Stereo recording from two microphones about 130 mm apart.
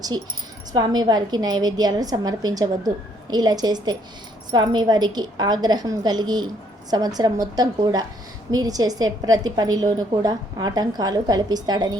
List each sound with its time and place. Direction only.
0.7 s a woman's voice: 30° right (ahead or behind)